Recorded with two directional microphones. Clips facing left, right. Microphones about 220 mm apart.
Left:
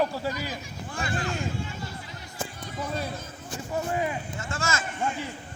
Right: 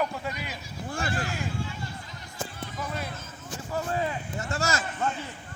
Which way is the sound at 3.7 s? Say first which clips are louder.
Left 1 dB; 20° left (ahead or behind).